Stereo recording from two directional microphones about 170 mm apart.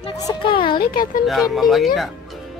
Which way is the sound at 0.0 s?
25° left (ahead or behind).